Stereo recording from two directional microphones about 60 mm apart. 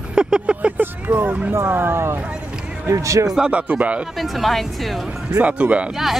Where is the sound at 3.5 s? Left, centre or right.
Right.